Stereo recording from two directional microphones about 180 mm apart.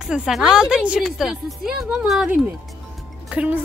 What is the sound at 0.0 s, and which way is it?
A woman's voice, 5° right (ahead or behind).